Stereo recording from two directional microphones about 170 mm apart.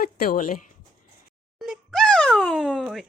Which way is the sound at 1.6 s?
Centre (ahead or behind).